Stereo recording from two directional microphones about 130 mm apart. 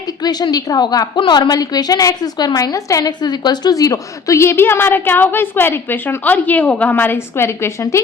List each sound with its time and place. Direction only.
0.2 s a woman's voice: 30° left (ahead or behind)